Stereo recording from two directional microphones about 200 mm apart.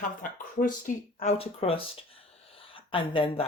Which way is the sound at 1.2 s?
30° left (ahead or behind).